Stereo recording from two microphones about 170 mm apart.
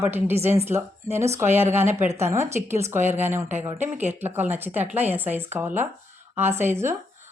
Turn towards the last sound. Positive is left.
turn(degrees=-15)  # may be behind; listen again after turning